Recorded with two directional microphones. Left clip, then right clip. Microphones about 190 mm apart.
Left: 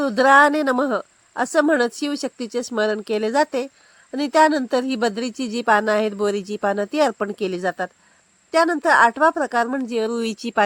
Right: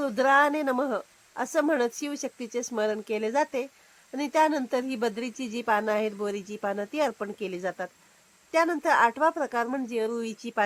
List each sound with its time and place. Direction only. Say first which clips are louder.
0.0 s speech: left 8 dB; 30° left (ahead or behind)